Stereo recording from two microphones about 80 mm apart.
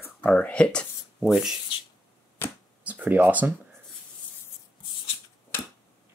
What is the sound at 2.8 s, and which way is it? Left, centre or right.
Speech, centre.